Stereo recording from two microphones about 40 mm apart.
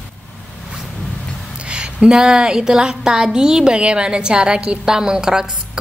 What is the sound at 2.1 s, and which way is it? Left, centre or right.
A woman's voice, centre.